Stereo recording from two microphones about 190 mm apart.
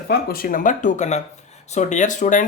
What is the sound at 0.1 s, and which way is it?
Speech, 55° left (ahead or behind).